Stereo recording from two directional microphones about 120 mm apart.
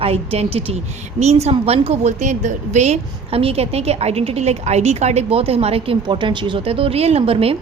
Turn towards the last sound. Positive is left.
turn(degrees=-50)  # may be behind; listen again after turning